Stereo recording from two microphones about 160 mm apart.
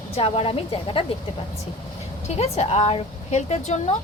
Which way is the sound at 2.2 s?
40° left (ahead or behind).